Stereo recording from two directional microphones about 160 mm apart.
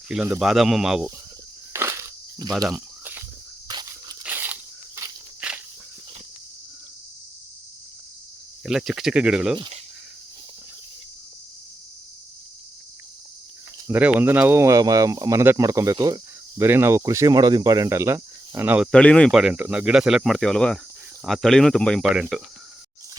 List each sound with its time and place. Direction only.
0.1 s speech: 5° right (ahead or behind)
1.7 s insect: 15° right (ahead or behind)
2.7 s a sound: 10° right (ahead or behind)
3.7 s a sound: 25° right (ahead or behind)
4.2 s a sound: 10° right (ahead or behind)
5.4 s walk: 10° right (ahead or behind)
8.6 s speech: 5° right (ahead or behind)
9.6 s speech: 35° right (ahead or behind)
13.8 s speech: 10° right (ahead or behind)
16.0 s cricket: 25° right (ahead or behind)
16.6 s speech: 15° right (ahead or behind)
18.9 s speech: 5° left (ahead or behind)